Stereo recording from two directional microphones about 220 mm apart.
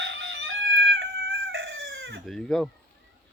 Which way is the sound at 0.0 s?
60° right (ahead or behind).